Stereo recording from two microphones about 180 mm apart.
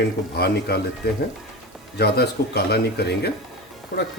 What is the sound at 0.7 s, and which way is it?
Speech, 60° left (ahead or behind).